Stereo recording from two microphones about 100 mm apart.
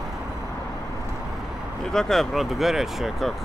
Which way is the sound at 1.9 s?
5° left (ahead or behind).